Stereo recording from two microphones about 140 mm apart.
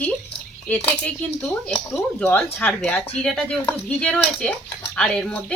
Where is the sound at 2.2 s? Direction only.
15° left (ahead or behind).